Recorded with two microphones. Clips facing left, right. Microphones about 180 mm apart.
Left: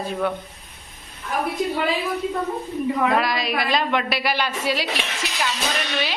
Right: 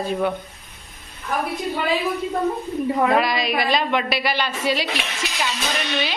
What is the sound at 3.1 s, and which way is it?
A woman's voice, centre (ahead or behind).